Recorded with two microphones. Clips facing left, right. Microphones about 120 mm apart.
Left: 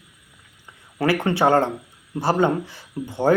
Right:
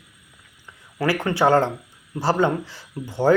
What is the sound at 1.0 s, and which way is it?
Speech, 25° left (ahead or behind).